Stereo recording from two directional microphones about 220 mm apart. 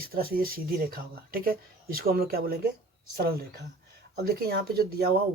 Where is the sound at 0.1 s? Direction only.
40° right (ahead or behind).